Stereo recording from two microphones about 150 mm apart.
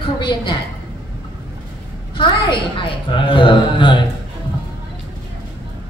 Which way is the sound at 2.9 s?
35° left (ahead or behind).